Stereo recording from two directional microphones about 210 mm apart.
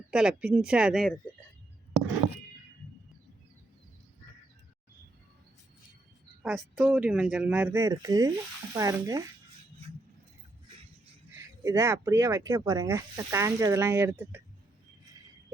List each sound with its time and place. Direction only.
0.1 s speech: 5° right (ahead or behind)
6.4 s speech: centre (ahead or behind); by 9.2 s 15° right (ahead or behind)
11.3 s speech: 15° right (ahead or behind)